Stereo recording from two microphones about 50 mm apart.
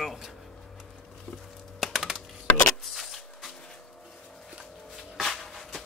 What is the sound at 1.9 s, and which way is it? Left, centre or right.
Typing, centre.